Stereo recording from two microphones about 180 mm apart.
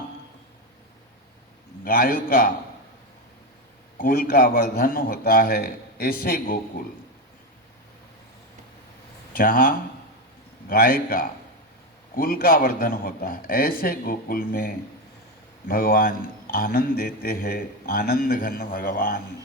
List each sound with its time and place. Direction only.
1.8 s speech: 55° left (ahead or behind)
3.9 s speech: 55° left (ahead or behind)
9.3 s speech: 50° left (ahead or behind)